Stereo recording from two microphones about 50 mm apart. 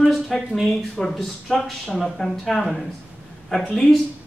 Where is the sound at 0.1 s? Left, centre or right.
Centre.